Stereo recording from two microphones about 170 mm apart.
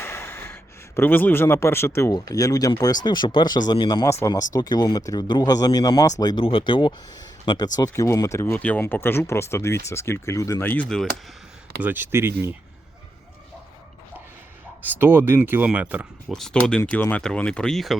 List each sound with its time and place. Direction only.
0.0 s speech: 15° left (ahead or behind)
11.8 s speech: 10° right (ahead or behind)
14.8 s speech: 10° right (ahead or behind)
16.3 s speech: 5° left (ahead or behind)